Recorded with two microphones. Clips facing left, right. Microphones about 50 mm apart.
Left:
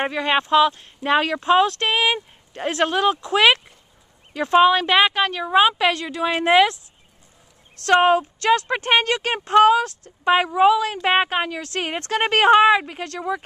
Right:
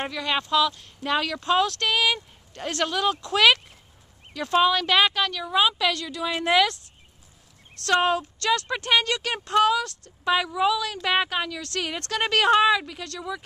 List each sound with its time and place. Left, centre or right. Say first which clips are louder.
0.1 s speech: left 5 dB; left
3.2 s speech: left 3 dB; centre
7.8 s speech: left 6 dB; left